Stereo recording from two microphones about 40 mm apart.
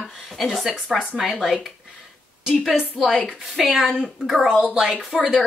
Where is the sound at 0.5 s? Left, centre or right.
Centre.